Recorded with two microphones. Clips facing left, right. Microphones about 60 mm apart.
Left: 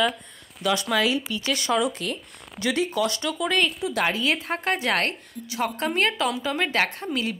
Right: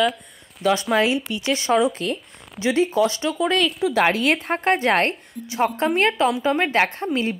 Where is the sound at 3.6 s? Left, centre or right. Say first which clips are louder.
Right 3 dB; centre.